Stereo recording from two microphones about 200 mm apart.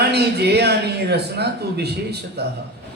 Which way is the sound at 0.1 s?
55° right (ahead or behind).